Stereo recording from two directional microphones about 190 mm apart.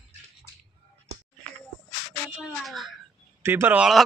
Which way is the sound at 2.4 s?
Centre (ahead or behind).